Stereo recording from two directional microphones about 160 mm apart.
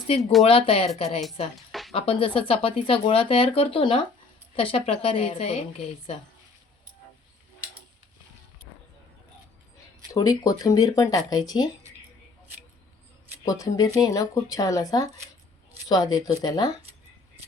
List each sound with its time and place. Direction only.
0.2 s speech: centre (ahead or behind)
0.4 s speech: 35° left (ahead or behind)
10.1 s speech: 20° left (ahead or behind)
13.4 s speech: 20° left (ahead or behind)